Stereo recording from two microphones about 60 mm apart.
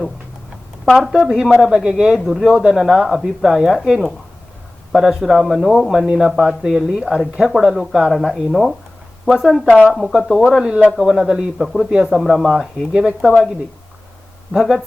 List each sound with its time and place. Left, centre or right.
0.9 s speech: centre
6.6 s speech: centre
10.6 s speech: centre
13.3 s speech: centre
14.5 s speech: centre